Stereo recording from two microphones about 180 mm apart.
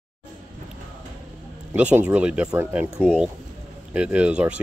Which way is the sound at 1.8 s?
10° right (ahead or behind).